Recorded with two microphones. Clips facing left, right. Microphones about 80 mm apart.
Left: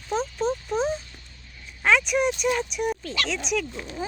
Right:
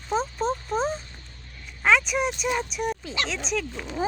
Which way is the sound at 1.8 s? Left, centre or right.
Centre.